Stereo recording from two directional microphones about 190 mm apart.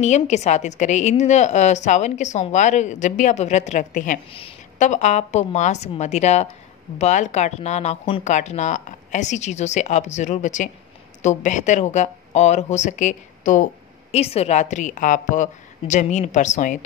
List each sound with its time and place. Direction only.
0.0 s a woman's voice: 35° left (ahead or behind)
4.3 s a woman's voice: 30° left (ahead or behind)